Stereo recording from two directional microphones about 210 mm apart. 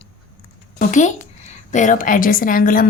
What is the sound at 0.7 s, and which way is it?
A woman's voice, 35° left (ahead or behind).